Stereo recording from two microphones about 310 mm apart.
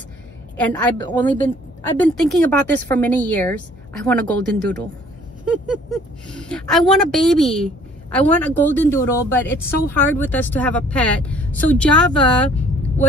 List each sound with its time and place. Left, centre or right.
0.6 s a woman's voice: centre
6.2 s a woman's voice: centre